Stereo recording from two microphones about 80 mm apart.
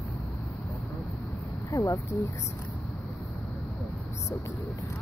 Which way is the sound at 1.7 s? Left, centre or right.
Left.